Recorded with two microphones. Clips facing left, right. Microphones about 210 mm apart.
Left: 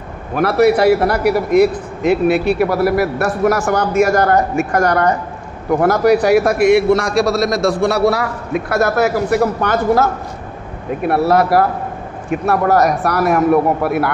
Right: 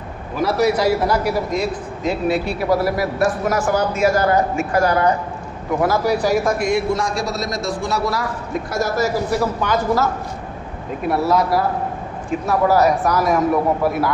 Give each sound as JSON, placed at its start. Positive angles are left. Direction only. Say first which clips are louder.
{"t": 0.3, "sound": "a man's voice", "louder": "left 5 dB", "side_deg": 60}
{"t": 5.8, "sound": "a man's voice", "louder": "left 6 dB", "side_deg": 65}